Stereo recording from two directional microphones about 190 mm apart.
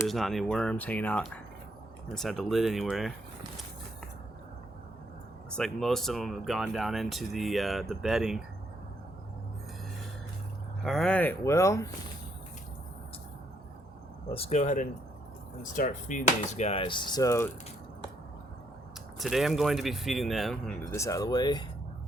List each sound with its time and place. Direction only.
0.1 s speech: centre (ahead or behind)
5.5 s speech: 5° left (ahead or behind)
10.8 s speech: 5° left (ahead or behind)
14.3 s speech: 35° left (ahead or behind); by 17.5 s 15° left (ahead or behind)
19.2 s speech: centre (ahead or behind)
20.9 s speech: 15° left (ahead or behind)